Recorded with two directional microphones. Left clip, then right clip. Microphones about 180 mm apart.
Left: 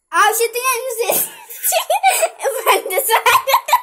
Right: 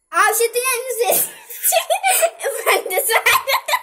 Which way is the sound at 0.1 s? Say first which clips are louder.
Left 2 dB; 55° left (ahead or behind).